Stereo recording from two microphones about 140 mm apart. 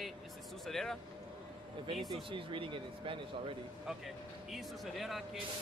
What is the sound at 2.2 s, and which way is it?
Speech, 40° right (ahead or behind).